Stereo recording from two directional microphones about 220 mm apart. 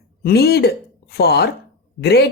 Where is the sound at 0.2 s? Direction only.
45° left (ahead or behind).